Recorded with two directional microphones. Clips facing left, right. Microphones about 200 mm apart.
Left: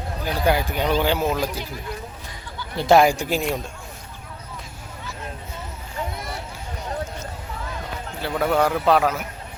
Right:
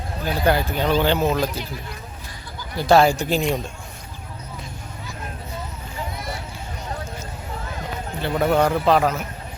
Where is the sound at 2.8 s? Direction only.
20° left (ahead or behind).